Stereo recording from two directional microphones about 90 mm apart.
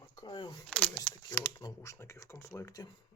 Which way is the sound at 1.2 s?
35° left (ahead or behind).